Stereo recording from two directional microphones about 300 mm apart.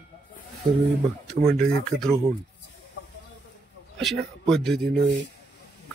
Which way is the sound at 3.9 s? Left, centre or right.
Centre.